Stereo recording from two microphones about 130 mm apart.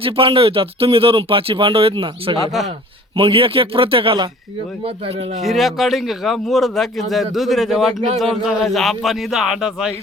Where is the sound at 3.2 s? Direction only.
45° right (ahead or behind).